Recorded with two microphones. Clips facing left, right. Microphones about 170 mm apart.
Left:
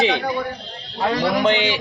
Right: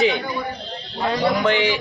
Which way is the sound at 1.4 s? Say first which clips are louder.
Even; 20° left (ahead or behind).